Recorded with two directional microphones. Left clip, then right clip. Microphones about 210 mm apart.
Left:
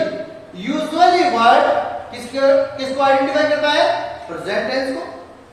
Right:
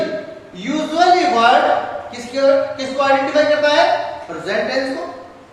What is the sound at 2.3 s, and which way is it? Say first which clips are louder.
Speech: even; 5° right (ahead or behind).